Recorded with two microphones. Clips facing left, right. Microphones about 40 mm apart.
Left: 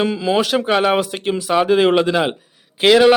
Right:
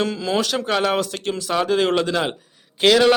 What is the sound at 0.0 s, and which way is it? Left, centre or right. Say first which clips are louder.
A man's voice: left 4 dB; centre.